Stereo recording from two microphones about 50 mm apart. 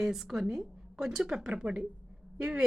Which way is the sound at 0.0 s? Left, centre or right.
Centre.